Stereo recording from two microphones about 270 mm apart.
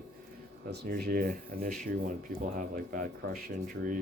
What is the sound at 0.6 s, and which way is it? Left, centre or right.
Speech, right.